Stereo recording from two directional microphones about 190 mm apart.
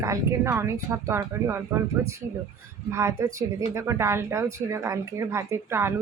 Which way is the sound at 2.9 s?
15° right (ahead or behind).